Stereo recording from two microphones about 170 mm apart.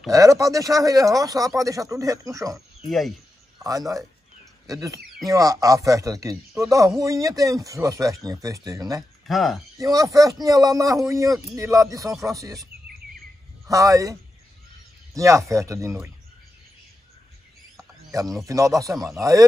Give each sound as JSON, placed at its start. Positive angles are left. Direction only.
{"t": 0.1, "sound": "speech", "side_deg": -20}
{"t": 2.9, "sound": "speech", "side_deg": 0}
{"t": 3.6, "sound": "speech", "side_deg": -20}
{"t": 9.3, "sound": "speech", "side_deg": 0}
{"t": 9.8, "sound": "speech", "side_deg": -20}
{"t": 13.7, "sound": "speech", "side_deg": -20}
{"t": 15.1, "sound": "speech", "side_deg": -20}
{"t": 18.1, "sound": "speech", "side_deg": -20}